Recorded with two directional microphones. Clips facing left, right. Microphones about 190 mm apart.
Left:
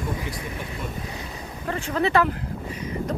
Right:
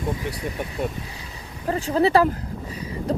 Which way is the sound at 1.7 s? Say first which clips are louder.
Right 4 dB; 35° right (ahead or behind).